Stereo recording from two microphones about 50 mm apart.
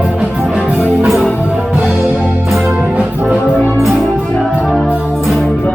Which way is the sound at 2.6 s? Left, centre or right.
Right.